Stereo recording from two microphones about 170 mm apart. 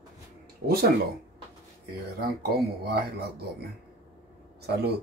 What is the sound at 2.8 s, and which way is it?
Speech, 70° right (ahead or behind).